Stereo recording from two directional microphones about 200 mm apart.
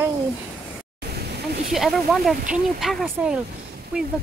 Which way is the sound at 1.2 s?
55° right (ahead or behind).